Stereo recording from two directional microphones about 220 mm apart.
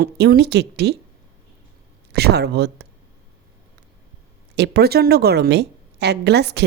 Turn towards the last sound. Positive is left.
turn(degrees=-50)  # may be behind; listen again after turning